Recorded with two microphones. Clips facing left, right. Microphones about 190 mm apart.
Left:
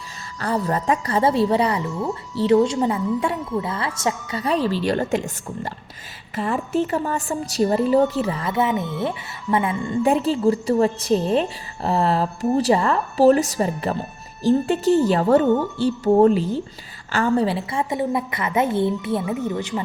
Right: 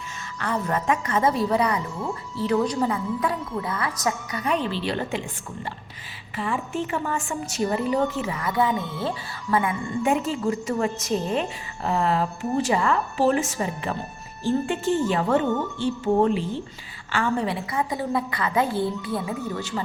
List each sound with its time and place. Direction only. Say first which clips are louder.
0.3 s a woman's voice: left 3 dB; 35° left (ahead or behind)